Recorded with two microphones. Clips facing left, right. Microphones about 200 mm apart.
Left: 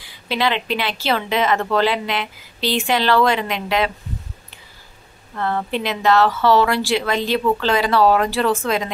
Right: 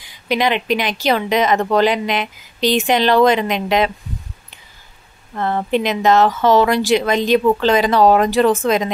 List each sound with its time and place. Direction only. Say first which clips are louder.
0.0 s a woman's voice: right 3 dB; 15° right (ahead or behind)
5.3 s speech: right 4 dB; 20° right (ahead or behind)